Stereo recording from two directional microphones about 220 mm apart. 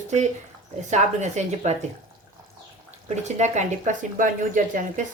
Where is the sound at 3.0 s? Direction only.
30° right (ahead or behind).